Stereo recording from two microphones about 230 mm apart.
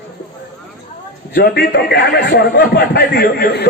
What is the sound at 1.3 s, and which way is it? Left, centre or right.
A man's voice, left.